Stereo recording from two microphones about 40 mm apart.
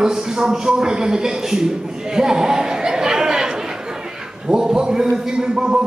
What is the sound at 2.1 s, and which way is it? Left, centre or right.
Chatter, centre.